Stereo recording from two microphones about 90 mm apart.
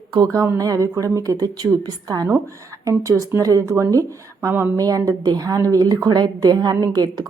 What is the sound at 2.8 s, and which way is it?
A woman's voice, 35° right (ahead or behind).